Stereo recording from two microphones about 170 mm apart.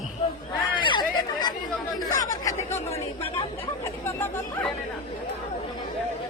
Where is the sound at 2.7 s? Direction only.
40° left (ahead or behind).